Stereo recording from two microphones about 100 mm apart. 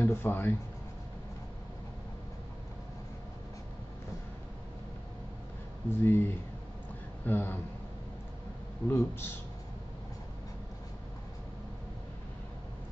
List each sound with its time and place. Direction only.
0.0 s speech: 25° left (ahead or behind)
5.9 s speech: 25° left (ahead or behind)
7.2 s speech: 20° left (ahead or behind)
8.8 s speech: 25° left (ahead or behind)